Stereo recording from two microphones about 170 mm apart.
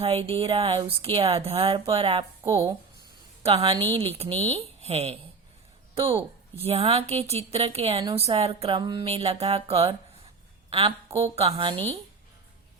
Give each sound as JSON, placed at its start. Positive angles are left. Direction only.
{"t": 0.0, "sound": "a woman's voice", "side_deg": -35}